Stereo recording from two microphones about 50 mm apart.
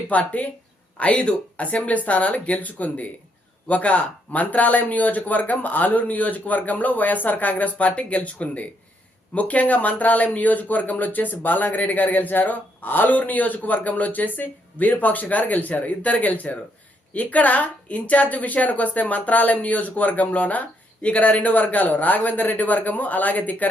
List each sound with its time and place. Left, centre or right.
0.1 s speech: left